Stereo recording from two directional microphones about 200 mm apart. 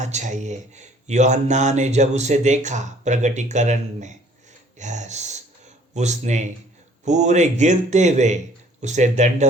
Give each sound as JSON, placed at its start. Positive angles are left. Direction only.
{"t": 0.0, "sound": "speech", "side_deg": -35}